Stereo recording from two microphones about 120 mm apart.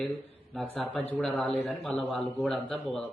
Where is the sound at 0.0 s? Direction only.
5° left (ahead or behind).